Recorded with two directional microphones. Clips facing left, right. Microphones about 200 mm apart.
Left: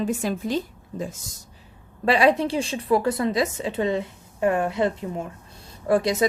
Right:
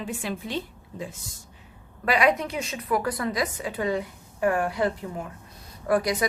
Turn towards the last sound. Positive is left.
turn(degrees=25)  # may be behind; listen again after turning